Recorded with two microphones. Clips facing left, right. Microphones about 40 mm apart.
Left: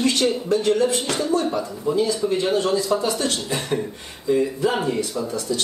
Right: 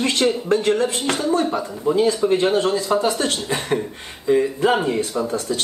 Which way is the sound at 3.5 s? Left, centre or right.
Right.